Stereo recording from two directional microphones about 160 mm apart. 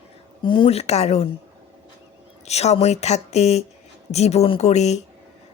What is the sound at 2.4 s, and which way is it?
A woman's voice, 40° left (ahead or behind).